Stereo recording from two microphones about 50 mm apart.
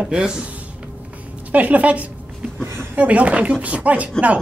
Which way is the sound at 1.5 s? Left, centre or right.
Right.